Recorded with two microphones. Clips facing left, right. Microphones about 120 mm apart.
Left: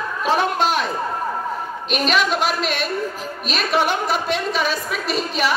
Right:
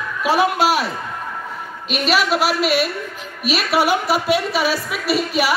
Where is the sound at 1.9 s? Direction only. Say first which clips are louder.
Right 1 dB; 5° right (ahead or behind).